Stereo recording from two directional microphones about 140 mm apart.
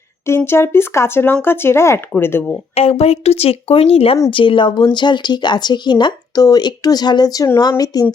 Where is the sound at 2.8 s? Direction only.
45° left (ahead or behind).